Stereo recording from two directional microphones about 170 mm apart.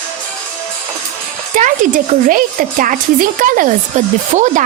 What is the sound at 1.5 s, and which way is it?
A woman's voice, 50° right (ahead or behind).